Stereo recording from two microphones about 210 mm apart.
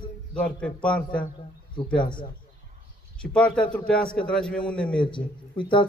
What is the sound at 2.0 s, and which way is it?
Speech, 20° left (ahead or behind).